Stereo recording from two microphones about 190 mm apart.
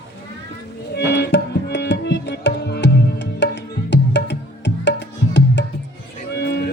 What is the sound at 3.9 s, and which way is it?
Music, 65° left (ahead or behind).